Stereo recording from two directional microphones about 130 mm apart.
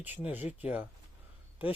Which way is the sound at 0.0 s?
10° right (ahead or behind).